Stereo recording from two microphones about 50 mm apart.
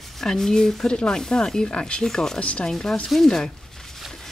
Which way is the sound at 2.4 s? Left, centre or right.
Left.